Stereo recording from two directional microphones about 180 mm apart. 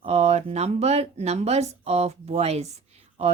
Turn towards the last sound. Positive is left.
turn(degrees=-35)  # may be behind; listen again after turning